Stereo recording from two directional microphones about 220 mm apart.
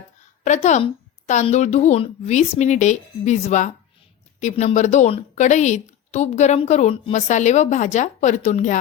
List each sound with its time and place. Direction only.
0.4 s a woman's voice: 30° left (ahead or behind)